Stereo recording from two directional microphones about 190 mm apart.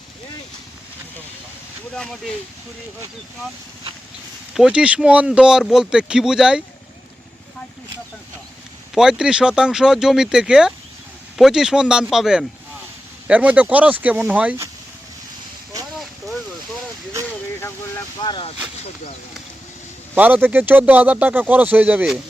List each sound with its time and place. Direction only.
4.5 s speech: 5° right (ahead or behind)
9.0 s speech: 5° right (ahead or behind)
17.6 s vehicle: 10° left (ahead or behind)
18.2 s speech: 25° left (ahead or behind)
20.1 s speech: 10° right (ahead or behind)